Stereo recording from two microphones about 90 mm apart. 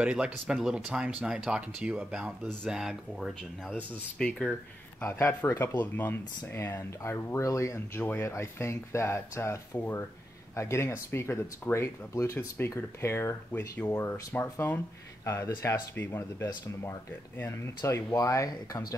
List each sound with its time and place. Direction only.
0.0 s speech: 10° right (ahead or behind)
3.7 s speech: 15° left (ahead or behind)
5.0 s speech: 25° left (ahead or behind)
13.9 s speech: 30° left (ahead or behind)